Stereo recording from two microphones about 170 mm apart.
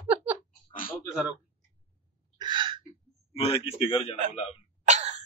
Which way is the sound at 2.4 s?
25° right (ahead or behind).